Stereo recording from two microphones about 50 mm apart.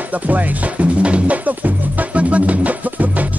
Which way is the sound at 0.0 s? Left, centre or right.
Right.